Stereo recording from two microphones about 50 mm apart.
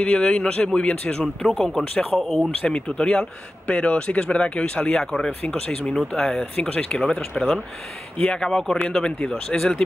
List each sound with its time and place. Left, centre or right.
0.0 s speech: left
1.2 s speech: centre
2.6 s speech: centre